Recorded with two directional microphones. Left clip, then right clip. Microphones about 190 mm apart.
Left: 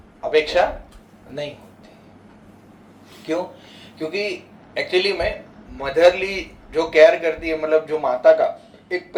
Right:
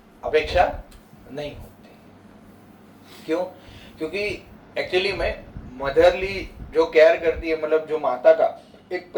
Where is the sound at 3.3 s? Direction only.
15° left (ahead or behind).